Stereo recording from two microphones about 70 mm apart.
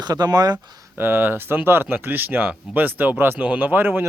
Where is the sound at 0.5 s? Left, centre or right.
Right.